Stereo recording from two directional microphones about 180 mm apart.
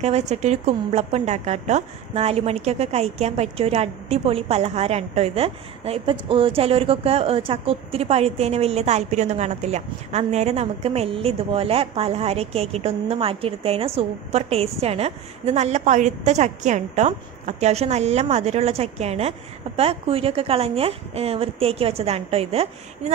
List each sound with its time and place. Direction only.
0.0 s a woman's voice: 40° right (ahead or behind)